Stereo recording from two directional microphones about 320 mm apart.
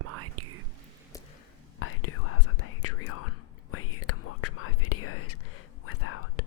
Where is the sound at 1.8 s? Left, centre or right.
Left.